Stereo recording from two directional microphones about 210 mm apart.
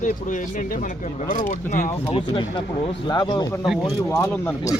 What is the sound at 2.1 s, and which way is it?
Speech, 25° left (ahead or behind).